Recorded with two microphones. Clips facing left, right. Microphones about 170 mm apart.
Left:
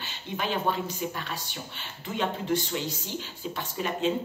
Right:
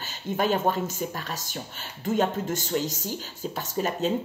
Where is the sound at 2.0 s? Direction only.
45° right (ahead or behind).